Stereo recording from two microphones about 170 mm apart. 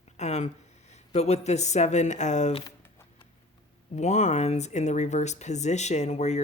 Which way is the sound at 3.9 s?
45° left (ahead or behind).